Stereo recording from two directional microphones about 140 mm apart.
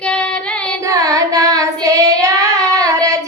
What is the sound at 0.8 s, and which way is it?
Child singing, 25° right (ahead or behind).